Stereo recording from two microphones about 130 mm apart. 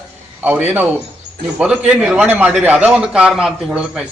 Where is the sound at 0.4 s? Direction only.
15° right (ahead or behind).